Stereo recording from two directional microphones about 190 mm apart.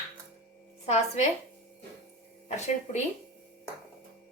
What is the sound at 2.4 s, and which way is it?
Speech, 35° left (ahead or behind).